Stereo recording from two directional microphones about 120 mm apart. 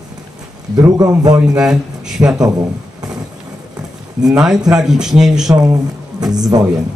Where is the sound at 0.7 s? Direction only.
30° right (ahead or behind).